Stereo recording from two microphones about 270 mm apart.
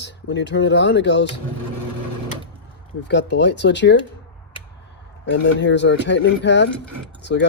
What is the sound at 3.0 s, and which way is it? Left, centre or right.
Speech, left.